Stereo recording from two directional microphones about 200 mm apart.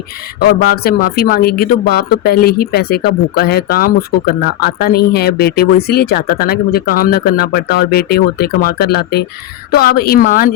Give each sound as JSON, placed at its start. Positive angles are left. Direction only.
{"t": 0.3, "sound": "speech", "side_deg": 50}